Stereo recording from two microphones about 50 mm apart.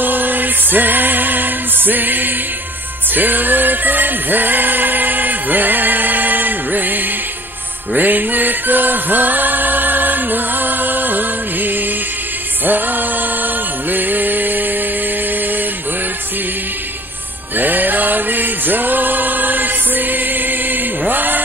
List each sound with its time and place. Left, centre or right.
0.0 s music: right
17.6 s music: right